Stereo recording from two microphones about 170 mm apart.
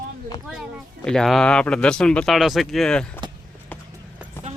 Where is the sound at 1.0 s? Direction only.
5° left (ahead or behind).